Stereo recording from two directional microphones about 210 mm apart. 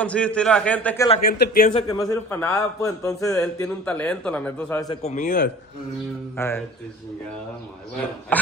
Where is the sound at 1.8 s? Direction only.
15° left (ahead or behind).